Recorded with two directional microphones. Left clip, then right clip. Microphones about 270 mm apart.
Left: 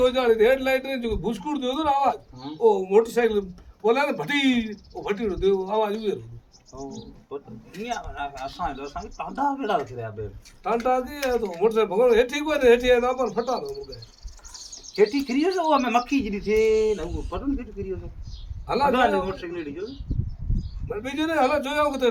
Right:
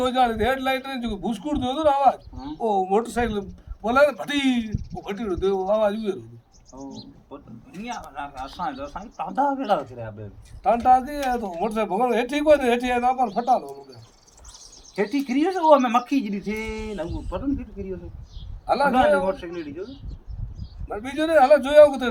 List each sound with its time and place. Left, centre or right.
0.0 s a man's voice: centre
7.9 s a man's voice: centre
14.9 s a man's voice: centre
18.6 s a man's voice: centre
20.9 s a man's voice: centre